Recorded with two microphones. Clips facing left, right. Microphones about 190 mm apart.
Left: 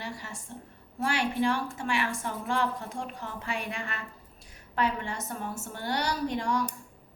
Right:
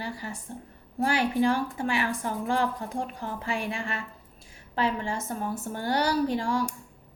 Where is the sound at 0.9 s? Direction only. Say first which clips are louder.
Right 4 dB; 35° right (ahead or behind).